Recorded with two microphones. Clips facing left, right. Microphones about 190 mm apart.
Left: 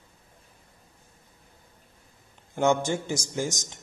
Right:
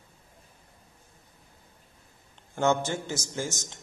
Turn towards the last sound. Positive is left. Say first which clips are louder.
# left 3 dB
turn(degrees=15)  # may be behind; listen again after turning